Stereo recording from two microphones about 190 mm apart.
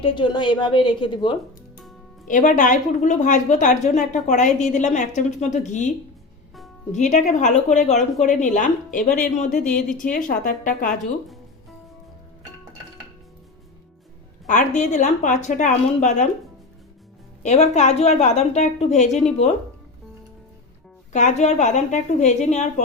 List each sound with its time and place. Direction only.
0.0 s a woman's voice: 25° left (ahead or behind)
2.2 s a woman's voice: 40° left (ahead or behind)
6.9 s a woman's voice: 40° left (ahead or behind)
14.4 s a woman's voice: 40° left (ahead or behind)
17.4 s a woman's voice: 35° left (ahead or behind)
21.1 s a woman's voice: 40° left (ahead or behind)